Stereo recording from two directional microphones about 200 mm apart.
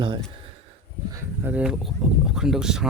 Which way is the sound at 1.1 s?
10° right (ahead or behind).